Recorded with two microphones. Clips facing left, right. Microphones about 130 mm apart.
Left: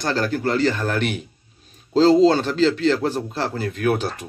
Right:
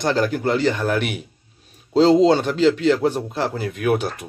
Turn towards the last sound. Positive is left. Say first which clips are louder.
# even
turn(degrees=-10)  # may be behind; listen again after turning